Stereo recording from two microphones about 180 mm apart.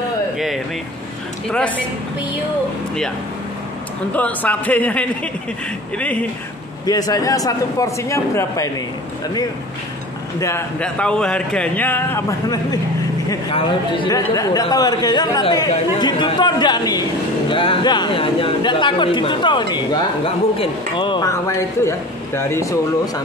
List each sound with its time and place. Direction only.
4.1 s speech: 10° left (ahead or behind)
6.9 s speech: 20° left (ahead or behind)
10.4 s speech: 10° left (ahead or behind)
13.5 s speech: 30° left (ahead or behind)